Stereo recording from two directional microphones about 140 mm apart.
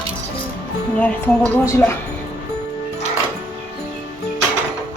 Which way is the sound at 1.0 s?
10° left (ahead or behind).